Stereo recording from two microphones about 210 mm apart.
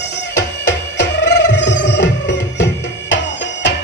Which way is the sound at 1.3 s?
55° left (ahead or behind).